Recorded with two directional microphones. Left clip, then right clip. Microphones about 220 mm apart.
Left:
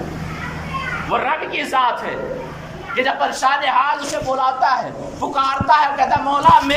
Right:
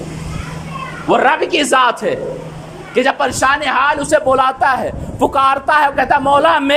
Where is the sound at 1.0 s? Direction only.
50° right (ahead or behind).